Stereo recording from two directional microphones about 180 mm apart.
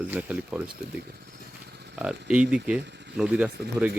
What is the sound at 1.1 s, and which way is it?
Vehicle, 60° right (ahead or behind).